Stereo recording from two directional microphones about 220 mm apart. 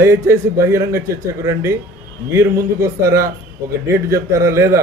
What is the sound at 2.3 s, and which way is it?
A man's voice, 10° right (ahead or behind).